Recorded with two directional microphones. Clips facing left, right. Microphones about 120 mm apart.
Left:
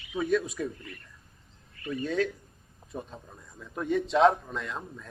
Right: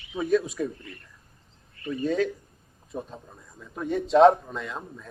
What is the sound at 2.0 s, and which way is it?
Speech, centre (ahead or behind).